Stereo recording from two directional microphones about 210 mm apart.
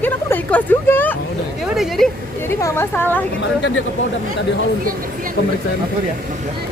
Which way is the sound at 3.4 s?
60° left (ahead or behind).